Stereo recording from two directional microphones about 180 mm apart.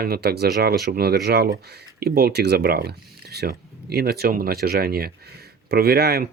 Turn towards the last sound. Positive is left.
turn(degrees=-60)  # may be behind; listen again after turning